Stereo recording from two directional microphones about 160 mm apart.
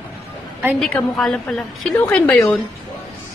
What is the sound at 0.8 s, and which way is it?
Speech, 5° left (ahead or behind).